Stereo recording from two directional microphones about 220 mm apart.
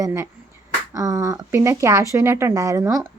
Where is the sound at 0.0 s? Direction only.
10° right (ahead or behind).